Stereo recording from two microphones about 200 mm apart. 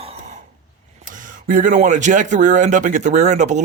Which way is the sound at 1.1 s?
40° right (ahead or behind).